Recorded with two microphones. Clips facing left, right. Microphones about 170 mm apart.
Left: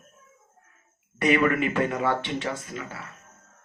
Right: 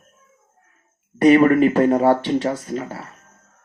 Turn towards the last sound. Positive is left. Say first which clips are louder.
# right 9 dB
turn(degrees=-35)  # may be behind; listen again after turning